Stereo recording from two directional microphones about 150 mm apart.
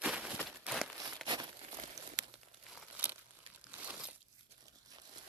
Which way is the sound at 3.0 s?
10° right (ahead or behind).